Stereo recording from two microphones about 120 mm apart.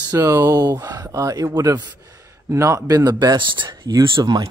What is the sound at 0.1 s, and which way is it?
Speech, 25° right (ahead or behind).